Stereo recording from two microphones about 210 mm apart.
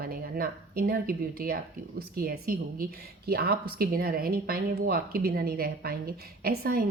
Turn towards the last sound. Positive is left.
turn(degrees=-45)  # may be behind; listen again after turning